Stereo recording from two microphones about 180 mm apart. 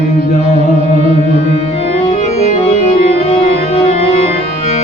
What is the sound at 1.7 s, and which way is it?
Music, 35° left (ahead or behind).